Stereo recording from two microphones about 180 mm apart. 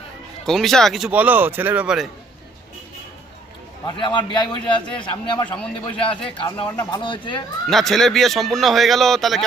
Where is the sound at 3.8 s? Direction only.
25° left (ahead or behind).